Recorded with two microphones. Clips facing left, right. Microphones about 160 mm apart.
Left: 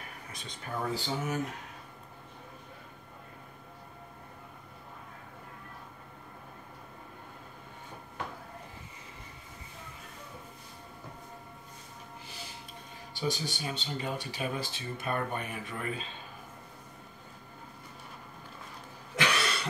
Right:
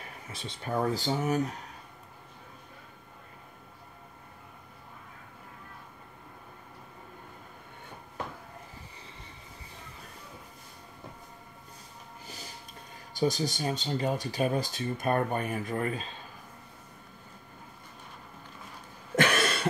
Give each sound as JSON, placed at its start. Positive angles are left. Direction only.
{"t": 0.0, "sound": "a sound", "side_deg": -25}
{"t": 0.7, "sound": "speech", "side_deg": -40}
{"t": 13.1, "sound": "speech", "side_deg": -40}
{"t": 19.1, "sound": "cough", "side_deg": -50}